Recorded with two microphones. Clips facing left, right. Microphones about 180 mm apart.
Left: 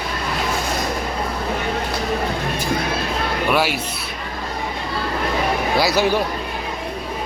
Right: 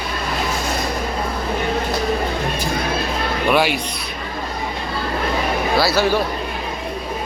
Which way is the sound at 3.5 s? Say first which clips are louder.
Right 3 dB; 5° left (ahead or behind).